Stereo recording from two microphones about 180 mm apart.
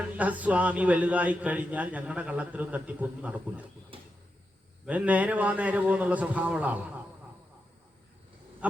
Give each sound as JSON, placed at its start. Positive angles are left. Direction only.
{"t": 0.2, "sound": "a man's voice", "side_deg": -10}
{"t": 3.9, "sound": "cupboard open or close", "side_deg": -30}
{"t": 4.9, "sound": "a man's voice", "side_deg": -10}